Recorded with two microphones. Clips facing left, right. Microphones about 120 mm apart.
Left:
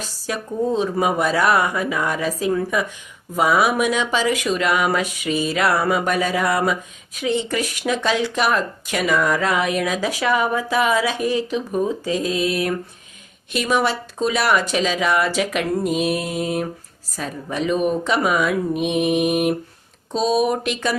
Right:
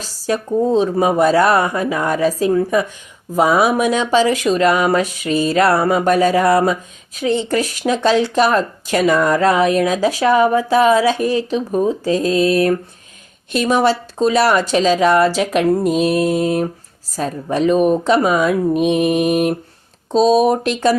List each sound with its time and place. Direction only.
0.0 s speech: 30° right (ahead or behind)
15.8 s music: 5° left (ahead or behind)
17.2 s speech: 35° right (ahead or behind)
18.7 s mantra: 5° left (ahead or behind)
20.1 s speech: 35° right (ahead or behind)